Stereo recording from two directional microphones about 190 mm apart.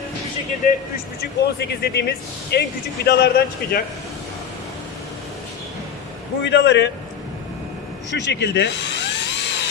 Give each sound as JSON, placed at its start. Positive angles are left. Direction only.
{"t": 0.6, "sound": "speech", "side_deg": 45}
{"t": 1.2, "sound": "speech", "side_deg": 60}
{"t": 6.4, "sound": "a man's voice", "side_deg": 65}
{"t": 8.1, "sound": "drill", "side_deg": 65}